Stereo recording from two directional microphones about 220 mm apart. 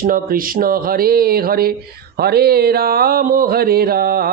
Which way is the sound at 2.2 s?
45° right (ahead or behind).